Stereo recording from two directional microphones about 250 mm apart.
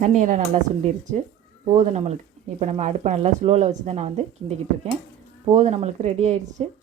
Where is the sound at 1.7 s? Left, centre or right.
Right.